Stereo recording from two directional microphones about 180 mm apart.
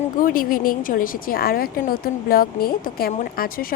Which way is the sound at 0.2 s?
50° left (ahead or behind).